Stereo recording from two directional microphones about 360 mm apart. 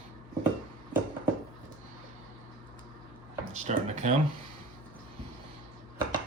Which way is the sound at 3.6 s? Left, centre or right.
Centre.